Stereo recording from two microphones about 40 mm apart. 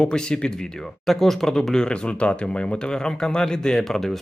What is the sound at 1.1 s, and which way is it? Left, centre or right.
Speech, centre.